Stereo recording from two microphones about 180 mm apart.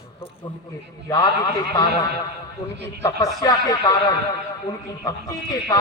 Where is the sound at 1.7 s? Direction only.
20° left (ahead or behind).